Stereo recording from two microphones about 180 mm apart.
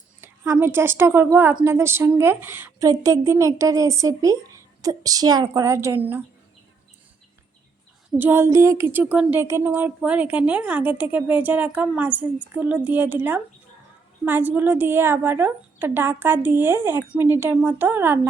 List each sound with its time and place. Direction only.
0.2 s a woman's voice: 10° right (ahead or behind)
8.2 s a woman's voice: 10° right (ahead or behind)